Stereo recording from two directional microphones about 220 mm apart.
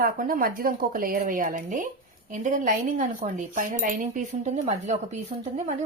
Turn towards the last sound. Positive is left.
turn(degrees=-30)  # may be behind; listen again after turning